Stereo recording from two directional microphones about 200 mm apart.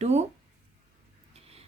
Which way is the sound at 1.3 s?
30° right (ahead or behind).